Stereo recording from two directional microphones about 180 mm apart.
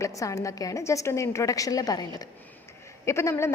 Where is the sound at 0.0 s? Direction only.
15° left (ahead or behind).